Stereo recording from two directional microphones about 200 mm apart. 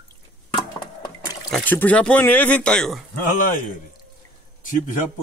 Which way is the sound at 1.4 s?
5° left (ahead or behind).